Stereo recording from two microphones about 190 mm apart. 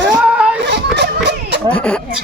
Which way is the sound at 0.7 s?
65° right (ahead or behind).